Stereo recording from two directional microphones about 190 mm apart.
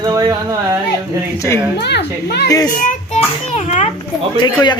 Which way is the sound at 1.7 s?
60° left (ahead or behind).